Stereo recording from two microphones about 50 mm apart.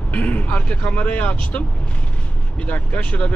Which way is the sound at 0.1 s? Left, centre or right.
Left.